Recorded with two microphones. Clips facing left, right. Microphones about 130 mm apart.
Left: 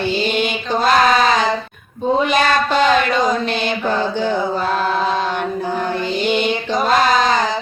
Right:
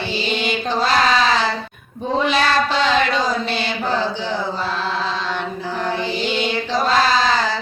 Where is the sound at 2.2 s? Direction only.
50° left (ahead or behind).